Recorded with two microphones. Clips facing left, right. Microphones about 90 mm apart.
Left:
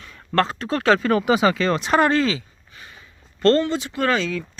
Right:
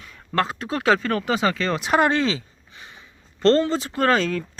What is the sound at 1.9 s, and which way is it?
Speech, 20° right (ahead or behind).